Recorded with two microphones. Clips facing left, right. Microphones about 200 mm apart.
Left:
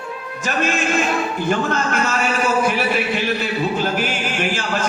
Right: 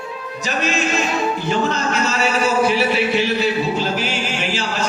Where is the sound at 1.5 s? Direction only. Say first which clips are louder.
Left 2 dB; 50° left (ahead or behind).